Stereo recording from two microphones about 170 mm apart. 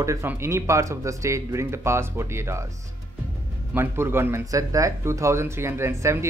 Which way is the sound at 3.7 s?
15° right (ahead or behind).